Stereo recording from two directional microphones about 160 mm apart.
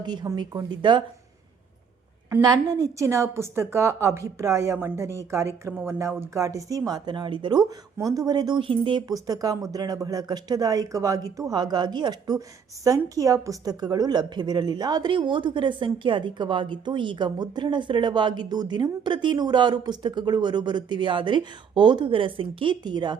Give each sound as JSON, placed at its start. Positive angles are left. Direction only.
{"t": 0.0, "sound": "a woman's voice", "side_deg": -25}
{"t": 2.4, "sound": "a woman's voice", "side_deg": -25}